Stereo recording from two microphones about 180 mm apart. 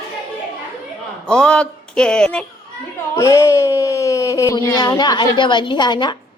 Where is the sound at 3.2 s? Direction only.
15° left (ahead or behind).